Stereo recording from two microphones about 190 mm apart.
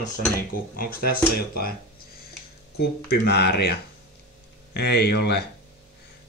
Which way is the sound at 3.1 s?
55° left (ahead or behind).